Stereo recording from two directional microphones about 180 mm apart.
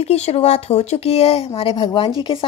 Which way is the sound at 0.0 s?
35° left (ahead or behind).